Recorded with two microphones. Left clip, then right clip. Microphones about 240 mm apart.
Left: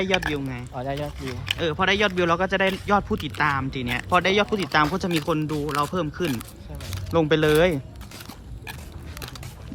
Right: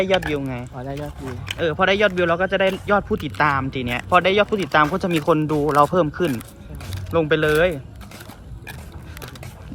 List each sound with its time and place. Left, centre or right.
0.0 s speech: centre